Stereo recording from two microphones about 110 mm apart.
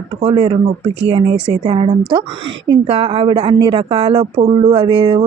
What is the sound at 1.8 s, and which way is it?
Speech, 60° right (ahead or behind).